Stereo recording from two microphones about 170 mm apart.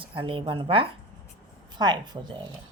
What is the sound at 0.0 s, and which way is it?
Speech, 30° right (ahead or behind).